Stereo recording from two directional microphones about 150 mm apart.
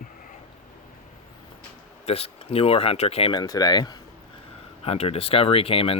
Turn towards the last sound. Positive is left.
turn(degrees=40)  # may be behind; listen again after turning